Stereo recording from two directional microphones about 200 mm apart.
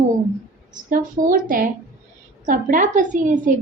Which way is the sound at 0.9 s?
45° right (ahead or behind).